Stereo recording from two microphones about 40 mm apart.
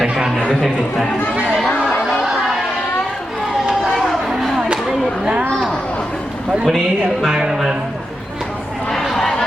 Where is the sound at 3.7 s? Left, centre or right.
Centre.